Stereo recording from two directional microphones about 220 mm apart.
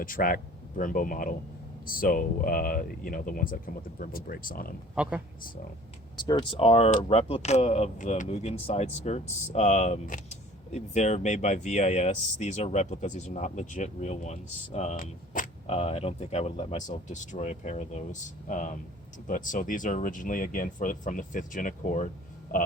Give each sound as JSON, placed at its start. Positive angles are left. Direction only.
{"t": 0.0, "sound": "speech", "side_deg": 40}
{"t": 5.0, "sound": "speech", "side_deg": -5}
{"t": 6.2, "sound": "speech", "side_deg": 20}